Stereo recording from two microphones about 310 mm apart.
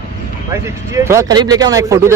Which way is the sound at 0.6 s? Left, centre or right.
Centre.